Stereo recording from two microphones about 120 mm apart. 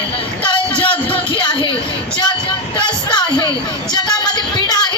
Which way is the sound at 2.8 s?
40° left (ahead or behind).